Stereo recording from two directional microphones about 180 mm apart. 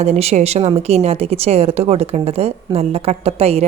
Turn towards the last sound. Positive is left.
turn(degrees=-35)  # may be behind; listen again after turning